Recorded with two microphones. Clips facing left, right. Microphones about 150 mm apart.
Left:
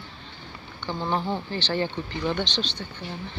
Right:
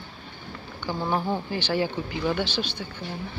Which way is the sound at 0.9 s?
10° right (ahead or behind).